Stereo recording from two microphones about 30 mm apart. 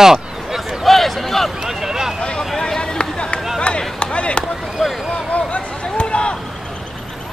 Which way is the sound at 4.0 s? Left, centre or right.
Left.